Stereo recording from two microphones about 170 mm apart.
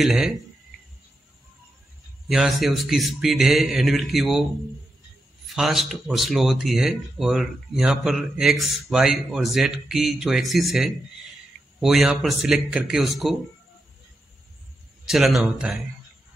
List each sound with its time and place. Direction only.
0.0 s speech: centre (ahead or behind)
2.2 s speech: centre (ahead or behind)
5.5 s speech: centre (ahead or behind)
15.0 s speech: centre (ahead or behind)